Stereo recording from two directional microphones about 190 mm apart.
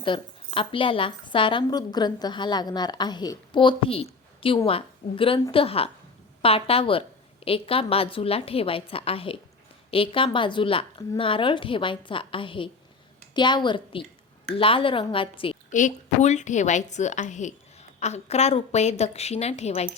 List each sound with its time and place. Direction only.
0.0 s a woman's voice: 25° left (ahead or behind)
15.7 s a woman's voice: 40° left (ahead or behind)